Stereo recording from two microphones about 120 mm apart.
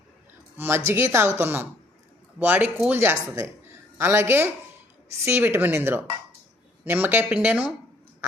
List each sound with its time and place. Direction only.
0.5 s speech: 20° right (ahead or behind)